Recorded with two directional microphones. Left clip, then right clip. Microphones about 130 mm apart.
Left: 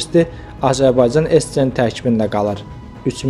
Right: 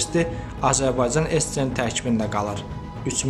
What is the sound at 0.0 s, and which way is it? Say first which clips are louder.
A man's voice: left 8 dB; 35° left (ahead or behind).